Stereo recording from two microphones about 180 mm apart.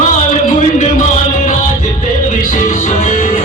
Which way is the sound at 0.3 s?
45° left (ahead or behind).